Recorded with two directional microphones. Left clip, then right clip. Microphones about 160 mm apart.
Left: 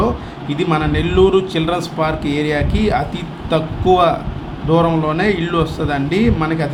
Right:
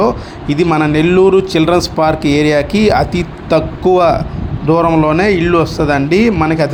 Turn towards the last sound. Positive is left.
turn(degrees=-40)  # may be behind; listen again after turning